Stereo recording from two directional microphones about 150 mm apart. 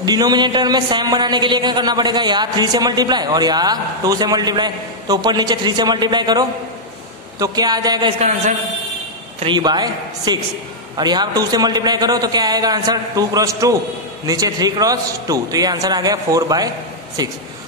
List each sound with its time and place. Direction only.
0.0 s speech: 25° right (ahead or behind)
8.2 s a man's voice: 50° right (ahead or behind)
9.4 s speech: 30° right (ahead or behind)